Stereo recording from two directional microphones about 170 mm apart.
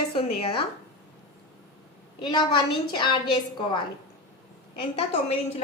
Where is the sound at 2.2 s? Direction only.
30° left (ahead or behind).